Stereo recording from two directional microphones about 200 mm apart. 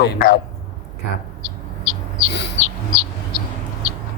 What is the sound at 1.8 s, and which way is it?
Bird, 40° left (ahead or behind).